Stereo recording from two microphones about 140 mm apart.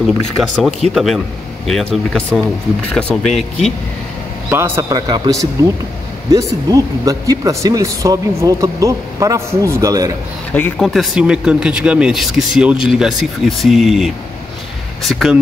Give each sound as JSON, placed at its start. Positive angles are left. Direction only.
{"t": 0.0, "sound": "speech", "side_deg": 0}
{"t": 4.5, "sound": "speech", "side_deg": -15}
{"t": 10.8, "sound": "speech", "side_deg": 0}